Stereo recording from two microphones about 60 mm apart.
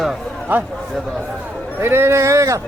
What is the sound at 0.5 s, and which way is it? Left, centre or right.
Speech, right.